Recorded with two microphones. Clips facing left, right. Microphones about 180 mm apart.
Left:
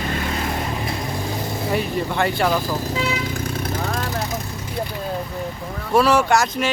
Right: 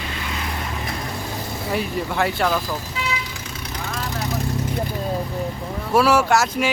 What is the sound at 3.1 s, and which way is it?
Vehicle, 50° left (ahead or behind).